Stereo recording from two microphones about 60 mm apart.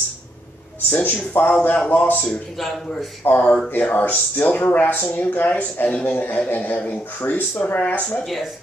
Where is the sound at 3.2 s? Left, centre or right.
Left.